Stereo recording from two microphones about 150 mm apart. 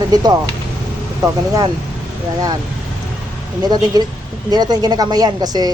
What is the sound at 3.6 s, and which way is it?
A woman's voice, 25° right (ahead or behind).